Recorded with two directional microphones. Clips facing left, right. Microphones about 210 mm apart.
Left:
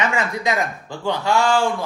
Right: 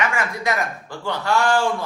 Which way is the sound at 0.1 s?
15° left (ahead or behind).